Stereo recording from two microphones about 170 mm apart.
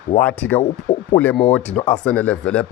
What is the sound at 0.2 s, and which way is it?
Speech, 10° left (ahead or behind).